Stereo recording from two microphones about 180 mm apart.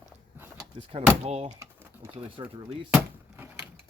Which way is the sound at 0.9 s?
30° right (ahead or behind).